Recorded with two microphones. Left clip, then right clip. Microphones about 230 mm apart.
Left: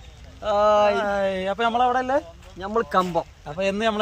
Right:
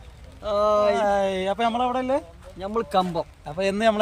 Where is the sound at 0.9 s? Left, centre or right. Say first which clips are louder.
Right 1 dB; centre.